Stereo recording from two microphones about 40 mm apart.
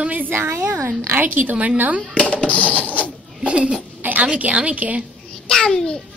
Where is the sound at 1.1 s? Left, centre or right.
Right.